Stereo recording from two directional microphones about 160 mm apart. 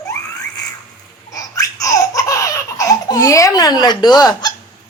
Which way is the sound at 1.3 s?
20° left (ahead or behind).